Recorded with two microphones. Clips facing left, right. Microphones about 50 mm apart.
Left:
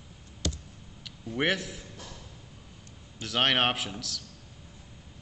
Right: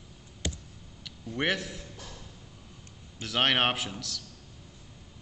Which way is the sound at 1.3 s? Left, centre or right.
Centre.